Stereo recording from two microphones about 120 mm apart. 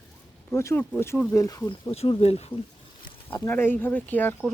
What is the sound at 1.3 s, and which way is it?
Speech, 30° left (ahead or behind).